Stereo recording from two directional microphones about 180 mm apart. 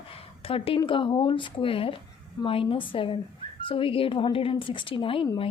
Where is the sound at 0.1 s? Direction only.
30° left (ahead or behind).